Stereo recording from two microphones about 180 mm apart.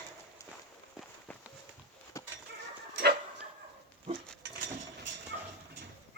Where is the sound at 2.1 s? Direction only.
15° left (ahead or behind).